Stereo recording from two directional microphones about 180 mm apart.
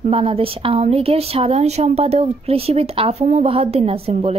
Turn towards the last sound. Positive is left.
turn(degrees=-35)  # may be behind; listen again after turning